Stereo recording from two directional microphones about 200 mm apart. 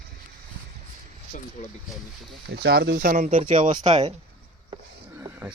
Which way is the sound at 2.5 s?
50° right (ahead or behind).